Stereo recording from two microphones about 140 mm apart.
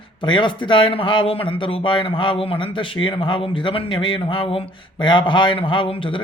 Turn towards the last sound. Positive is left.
turn(degrees=40)  # may be behind; listen again after turning